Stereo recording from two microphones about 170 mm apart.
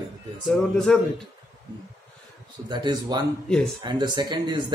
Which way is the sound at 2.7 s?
25° right (ahead or behind).